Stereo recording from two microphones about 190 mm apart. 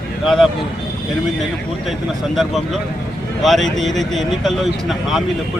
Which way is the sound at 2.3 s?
Centre (ahead or behind).